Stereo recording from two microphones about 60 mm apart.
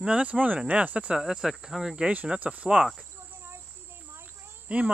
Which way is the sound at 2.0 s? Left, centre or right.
Centre.